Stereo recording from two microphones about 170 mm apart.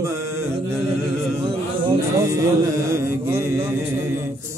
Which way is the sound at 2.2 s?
20° right (ahead or behind).